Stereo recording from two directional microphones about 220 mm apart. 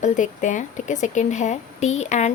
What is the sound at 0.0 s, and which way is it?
Speech, 35° left (ahead or behind).